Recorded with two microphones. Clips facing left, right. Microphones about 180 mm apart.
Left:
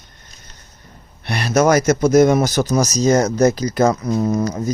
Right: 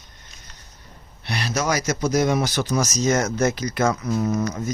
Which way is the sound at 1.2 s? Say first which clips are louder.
Left 9 dB; 55° left (ahead or behind).